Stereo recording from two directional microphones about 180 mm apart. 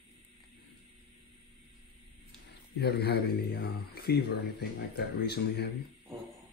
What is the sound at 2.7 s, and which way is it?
Speech, 65° left (ahead or behind).